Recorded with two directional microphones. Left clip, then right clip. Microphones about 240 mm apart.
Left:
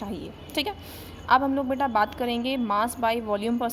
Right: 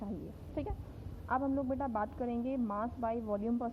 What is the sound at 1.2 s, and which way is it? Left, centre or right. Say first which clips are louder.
A woman's voice: left 12 dB; centre.